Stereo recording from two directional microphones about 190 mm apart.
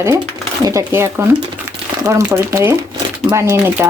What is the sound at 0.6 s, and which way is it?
Speech, 15° right (ahead or behind).